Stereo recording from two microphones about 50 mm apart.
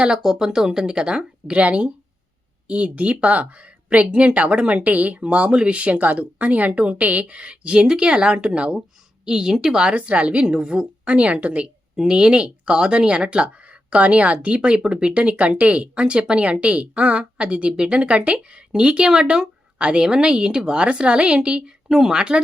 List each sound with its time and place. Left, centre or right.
0.0 s a woman's voice: centre
9.9 s speech: right
11.9 s speech: centre
21.8 s a woman's voice: centre